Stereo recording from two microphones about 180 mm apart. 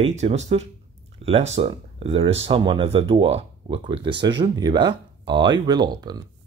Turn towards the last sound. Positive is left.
turn(degrees=-25)  # may be behind; listen again after turning